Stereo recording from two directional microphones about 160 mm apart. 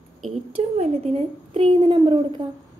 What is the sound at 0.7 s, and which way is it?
A woman's voice, 40° right (ahead or behind).